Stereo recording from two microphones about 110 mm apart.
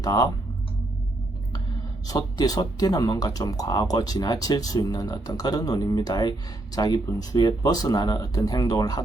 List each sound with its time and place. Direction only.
0.0 s speech: 35° left (ahead or behind)
2.0 s speech: 35° left (ahead or behind)